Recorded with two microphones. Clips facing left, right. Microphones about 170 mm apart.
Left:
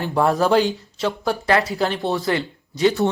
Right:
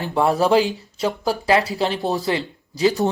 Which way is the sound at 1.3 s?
30° right (ahead or behind).